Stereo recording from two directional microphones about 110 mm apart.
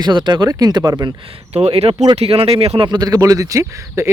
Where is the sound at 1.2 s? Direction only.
65° right (ahead or behind).